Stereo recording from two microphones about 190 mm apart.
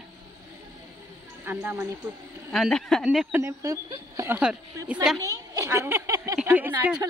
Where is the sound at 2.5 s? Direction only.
5° left (ahead or behind).